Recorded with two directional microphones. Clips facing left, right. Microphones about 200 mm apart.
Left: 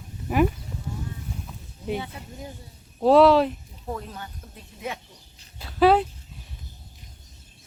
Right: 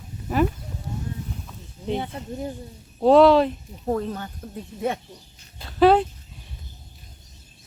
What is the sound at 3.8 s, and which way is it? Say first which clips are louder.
Speech: right 8 dB; 45° right (ahead or behind).